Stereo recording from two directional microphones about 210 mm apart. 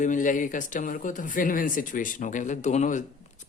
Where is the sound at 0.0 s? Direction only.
40° left (ahead or behind).